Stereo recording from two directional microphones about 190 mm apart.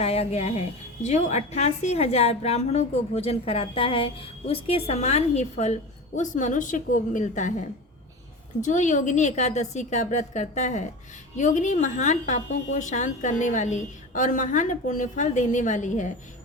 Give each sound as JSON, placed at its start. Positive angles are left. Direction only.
{"t": 0.0, "sound": "a woman's voice", "side_deg": 30}
{"t": 8.6, "sound": "a woman's voice", "side_deg": 40}